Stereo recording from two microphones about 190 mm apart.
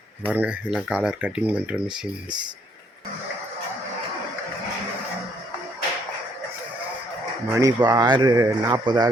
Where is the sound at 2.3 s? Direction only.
25° right (ahead or behind).